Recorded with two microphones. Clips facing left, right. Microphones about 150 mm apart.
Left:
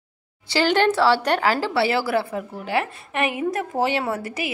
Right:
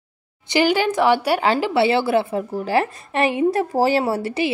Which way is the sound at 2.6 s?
35° right (ahead or behind).